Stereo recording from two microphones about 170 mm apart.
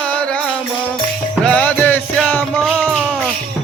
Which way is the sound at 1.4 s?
5° left (ahead or behind).